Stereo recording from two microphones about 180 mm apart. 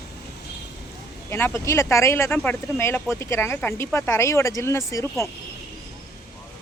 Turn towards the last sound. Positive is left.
turn(degrees=15)  # may be behind; listen again after turning